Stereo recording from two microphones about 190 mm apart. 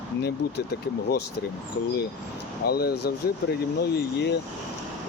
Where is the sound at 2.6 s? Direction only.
55° left (ahead or behind).